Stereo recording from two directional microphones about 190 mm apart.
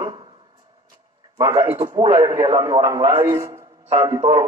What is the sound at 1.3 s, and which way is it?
A man's voice, 15° right (ahead or behind).